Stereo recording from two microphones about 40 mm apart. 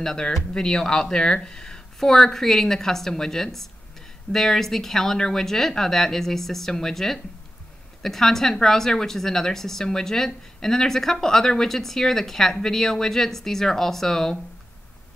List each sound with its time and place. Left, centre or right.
0.0 s a woman's voice: centre